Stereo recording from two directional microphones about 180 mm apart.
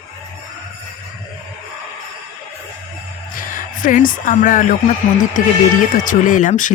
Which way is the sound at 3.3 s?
50° left (ahead or behind).